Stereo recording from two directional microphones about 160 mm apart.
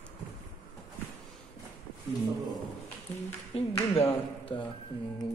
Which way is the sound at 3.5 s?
40° left (ahead or behind).